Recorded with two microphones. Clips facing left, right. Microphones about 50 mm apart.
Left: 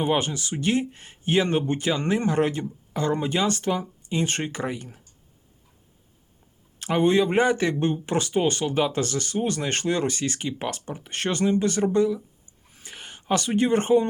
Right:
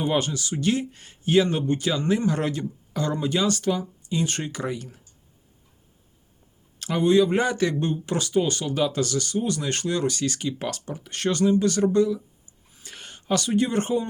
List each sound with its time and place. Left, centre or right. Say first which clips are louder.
0.0 s speech: left 1 dB; left
6.7 s speech: right 1 dB; left